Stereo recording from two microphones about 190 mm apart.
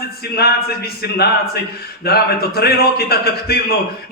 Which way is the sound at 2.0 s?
55° left (ahead or behind).